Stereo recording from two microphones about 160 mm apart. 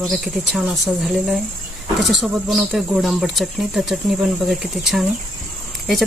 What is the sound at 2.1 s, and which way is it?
Speech, centre (ahead or behind).